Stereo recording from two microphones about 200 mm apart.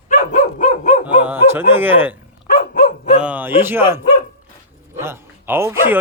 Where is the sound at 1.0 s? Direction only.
10° right (ahead or behind).